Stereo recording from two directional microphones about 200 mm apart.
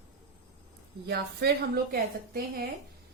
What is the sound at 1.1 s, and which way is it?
A woman's voice, 55° right (ahead or behind).